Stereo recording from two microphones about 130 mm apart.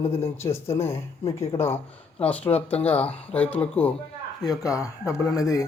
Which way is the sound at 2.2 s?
10° left (ahead or behind).